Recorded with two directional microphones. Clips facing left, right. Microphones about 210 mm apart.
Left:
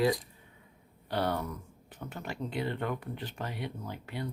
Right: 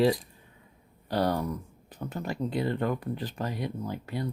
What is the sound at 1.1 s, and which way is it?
Speech, 40° right (ahead or behind).